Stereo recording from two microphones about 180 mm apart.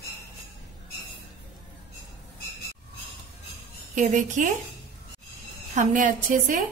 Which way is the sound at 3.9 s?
45° right (ahead or behind).